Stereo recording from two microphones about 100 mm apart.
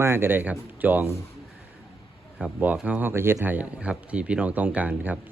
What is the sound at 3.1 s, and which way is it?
Speech, 25° right (ahead or behind).